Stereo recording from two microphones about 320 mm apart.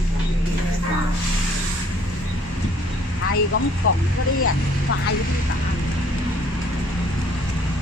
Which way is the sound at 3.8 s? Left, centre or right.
Left.